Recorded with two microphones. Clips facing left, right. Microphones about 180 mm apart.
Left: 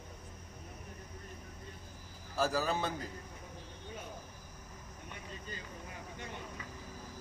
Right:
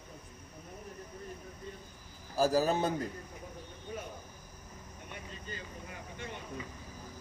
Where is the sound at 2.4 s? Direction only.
35° right (ahead or behind).